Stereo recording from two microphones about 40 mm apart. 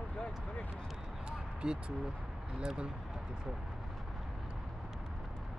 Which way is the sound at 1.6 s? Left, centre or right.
Right.